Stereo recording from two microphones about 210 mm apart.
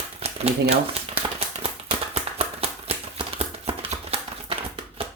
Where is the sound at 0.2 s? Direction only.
30° right (ahead or behind).